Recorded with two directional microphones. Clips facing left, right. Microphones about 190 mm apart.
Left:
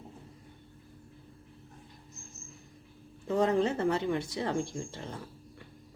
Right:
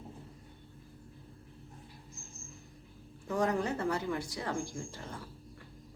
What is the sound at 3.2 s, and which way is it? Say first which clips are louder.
Speech: left 4 dB; 25° left (ahead or behind).